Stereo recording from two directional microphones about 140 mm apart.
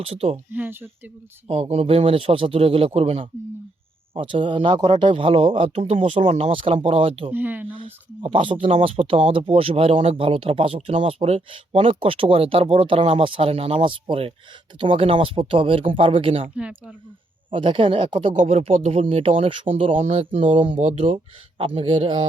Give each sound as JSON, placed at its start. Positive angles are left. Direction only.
{"t": 0.0, "sound": "a man's voice", "side_deg": -45}
{"t": 0.5, "sound": "speech", "side_deg": -15}
{"t": 1.5, "sound": "a man's voice", "side_deg": -45}
{"t": 7.3, "sound": "speech", "side_deg": -15}
{"t": 7.8, "sound": "speech", "side_deg": -40}
{"t": 16.6, "sound": "speech", "side_deg": -5}
{"t": 17.5, "sound": "a man's voice", "side_deg": -40}
{"t": 21.6, "sound": "speech", "side_deg": -40}